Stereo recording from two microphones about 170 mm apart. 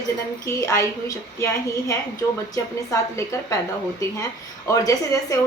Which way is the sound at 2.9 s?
20° left (ahead or behind).